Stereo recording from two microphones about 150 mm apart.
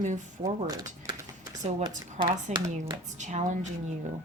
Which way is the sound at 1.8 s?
35° right (ahead or behind).